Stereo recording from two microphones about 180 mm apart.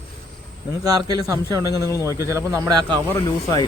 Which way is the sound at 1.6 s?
15° left (ahead or behind).